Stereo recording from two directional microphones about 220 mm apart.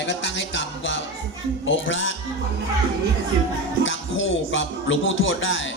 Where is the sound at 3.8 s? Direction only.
60° left (ahead or behind).